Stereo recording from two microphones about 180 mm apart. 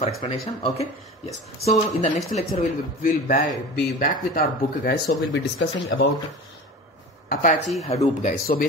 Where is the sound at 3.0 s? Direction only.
50° left (ahead or behind).